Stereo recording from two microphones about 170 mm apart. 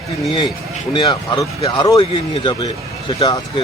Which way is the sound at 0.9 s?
25° left (ahead or behind).